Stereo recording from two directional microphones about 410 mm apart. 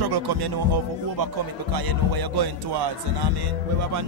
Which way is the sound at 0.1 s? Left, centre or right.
Right.